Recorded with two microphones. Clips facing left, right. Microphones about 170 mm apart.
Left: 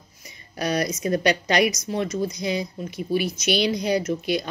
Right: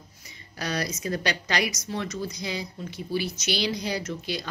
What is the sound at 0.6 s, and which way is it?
A woman's voice, 15° left (ahead or behind).